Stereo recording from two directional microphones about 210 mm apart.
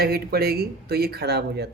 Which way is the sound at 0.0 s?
45° right (ahead or behind).